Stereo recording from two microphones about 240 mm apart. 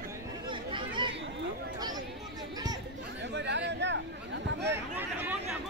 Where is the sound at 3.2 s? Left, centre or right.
Right.